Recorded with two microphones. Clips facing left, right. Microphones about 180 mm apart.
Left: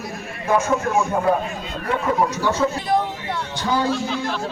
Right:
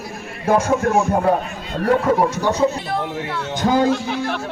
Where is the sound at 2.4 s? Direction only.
20° right (ahead or behind).